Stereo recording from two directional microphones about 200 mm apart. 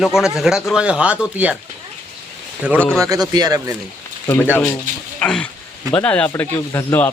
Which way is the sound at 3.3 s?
20° right (ahead or behind).